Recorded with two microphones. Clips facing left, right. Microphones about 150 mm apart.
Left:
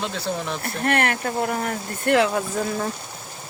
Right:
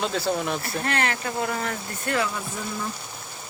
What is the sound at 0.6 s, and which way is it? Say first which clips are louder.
Speech: left 4 dB; 55° left (ahead or behind).